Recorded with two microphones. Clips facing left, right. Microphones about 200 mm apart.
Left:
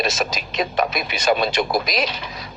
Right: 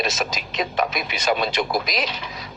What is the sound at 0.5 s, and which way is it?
A man's voice, 45° left (ahead or behind).